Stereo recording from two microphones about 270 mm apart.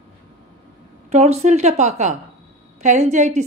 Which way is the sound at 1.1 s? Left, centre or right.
Right.